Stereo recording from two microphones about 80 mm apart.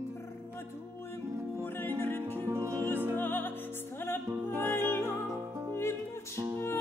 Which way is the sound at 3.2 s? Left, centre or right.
Left.